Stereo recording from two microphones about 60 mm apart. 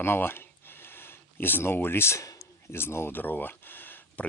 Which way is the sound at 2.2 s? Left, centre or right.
Left.